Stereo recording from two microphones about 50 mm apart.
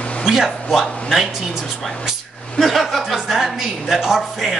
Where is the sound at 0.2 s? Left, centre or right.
Centre.